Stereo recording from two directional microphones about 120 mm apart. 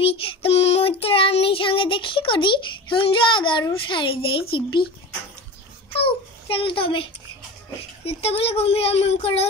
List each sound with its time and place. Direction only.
0.0 s child singing: 50° left (ahead or behind)
3.8 s a child's voice: 45° left (ahead or behind)
5.9 s a child's voice: 50° left (ahead or behind)